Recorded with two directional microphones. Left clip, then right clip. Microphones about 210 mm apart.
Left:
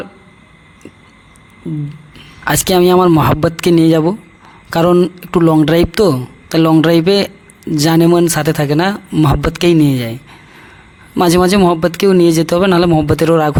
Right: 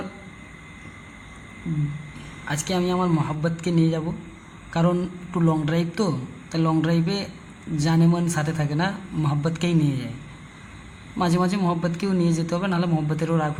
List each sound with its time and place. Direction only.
2.4 s a man's voice: 55° left (ahead or behind)
11.2 s speech: 55° left (ahead or behind)